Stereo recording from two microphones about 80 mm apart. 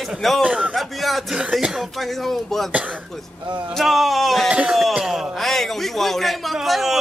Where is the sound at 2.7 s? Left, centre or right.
Centre.